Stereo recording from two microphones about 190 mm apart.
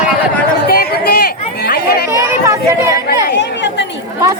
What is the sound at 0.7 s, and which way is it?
Chatter, 55° left (ahead or behind).